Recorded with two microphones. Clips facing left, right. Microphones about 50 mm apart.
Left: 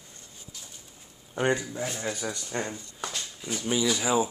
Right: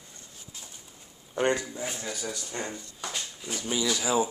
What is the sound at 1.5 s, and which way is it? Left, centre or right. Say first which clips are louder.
Speech: left 1 dB; centre.